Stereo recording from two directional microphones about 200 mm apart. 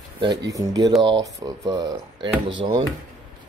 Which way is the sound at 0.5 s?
20° right (ahead or behind).